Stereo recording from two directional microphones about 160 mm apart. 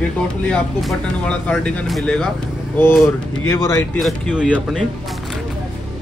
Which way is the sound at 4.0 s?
Centre (ahead or behind).